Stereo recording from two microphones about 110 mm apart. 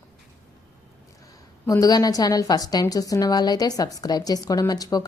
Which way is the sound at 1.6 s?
35° left (ahead or behind).